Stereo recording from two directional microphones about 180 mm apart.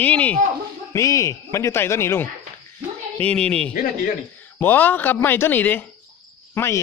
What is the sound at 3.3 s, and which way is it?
Speech, 5° left (ahead or behind).